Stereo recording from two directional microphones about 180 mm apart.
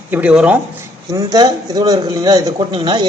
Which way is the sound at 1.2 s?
20° right (ahead or behind).